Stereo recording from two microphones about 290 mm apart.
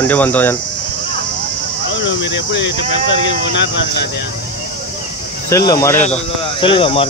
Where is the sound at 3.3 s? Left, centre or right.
Left.